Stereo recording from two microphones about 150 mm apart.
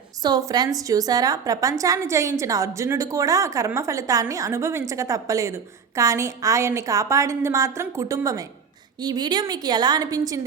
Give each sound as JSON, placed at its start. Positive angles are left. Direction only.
{"t": 0.2, "sound": "a woman's voice", "side_deg": -25}